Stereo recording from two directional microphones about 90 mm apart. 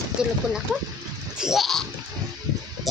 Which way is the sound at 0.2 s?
10° right (ahead or behind).